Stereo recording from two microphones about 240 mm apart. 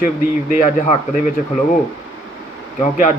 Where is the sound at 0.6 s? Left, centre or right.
Left.